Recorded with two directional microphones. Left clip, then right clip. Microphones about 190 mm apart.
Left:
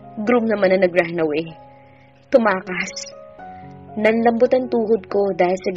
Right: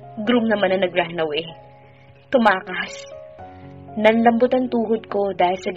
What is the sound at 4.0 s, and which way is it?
A woman's voice, 40° left (ahead or behind).